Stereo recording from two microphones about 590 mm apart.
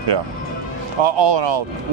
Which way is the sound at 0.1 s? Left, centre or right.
Right.